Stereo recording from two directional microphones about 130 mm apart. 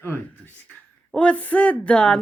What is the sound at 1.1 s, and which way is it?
Speech, 10° left (ahead or behind).